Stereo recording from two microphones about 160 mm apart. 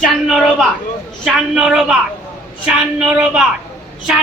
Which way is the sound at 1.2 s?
5° right (ahead or behind).